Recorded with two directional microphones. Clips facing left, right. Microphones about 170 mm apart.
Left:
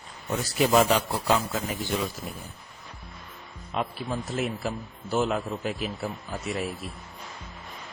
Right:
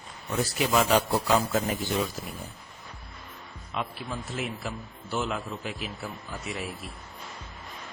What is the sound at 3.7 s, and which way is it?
A man's voice, 40° left (ahead or behind).